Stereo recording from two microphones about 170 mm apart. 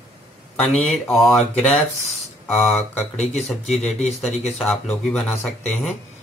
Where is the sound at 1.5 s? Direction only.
40° left (ahead or behind).